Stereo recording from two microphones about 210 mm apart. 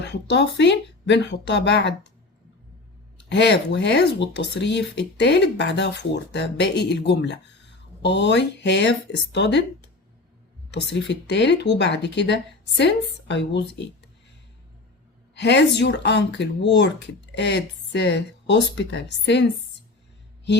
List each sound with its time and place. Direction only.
0.0 s speech: 55° left (ahead or behind)
3.2 s speech: 55° left (ahead or behind)
10.8 s speech: 55° left (ahead or behind)
15.4 s speech: 55° left (ahead or behind)